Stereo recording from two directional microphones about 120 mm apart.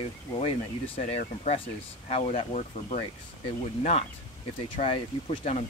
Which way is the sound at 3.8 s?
60° left (ahead or behind).